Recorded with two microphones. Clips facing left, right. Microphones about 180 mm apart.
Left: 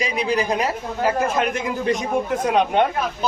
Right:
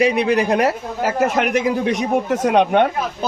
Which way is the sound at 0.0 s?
65° right (ahead or behind).